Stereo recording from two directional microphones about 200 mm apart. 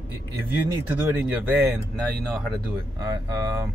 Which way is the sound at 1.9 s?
Centre (ahead or behind).